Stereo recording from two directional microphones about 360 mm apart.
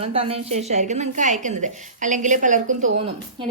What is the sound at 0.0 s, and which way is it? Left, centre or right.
A woman's voice, centre.